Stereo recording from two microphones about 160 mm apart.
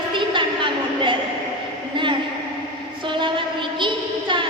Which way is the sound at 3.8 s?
30° right (ahead or behind).